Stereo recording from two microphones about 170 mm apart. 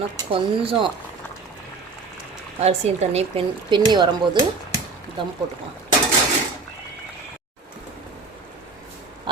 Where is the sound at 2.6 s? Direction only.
40° right (ahead or behind).